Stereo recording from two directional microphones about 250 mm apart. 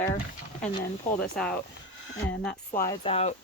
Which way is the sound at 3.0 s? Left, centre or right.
Left.